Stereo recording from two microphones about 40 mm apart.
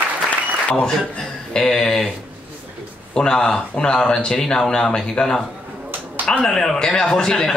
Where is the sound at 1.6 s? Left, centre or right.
Centre.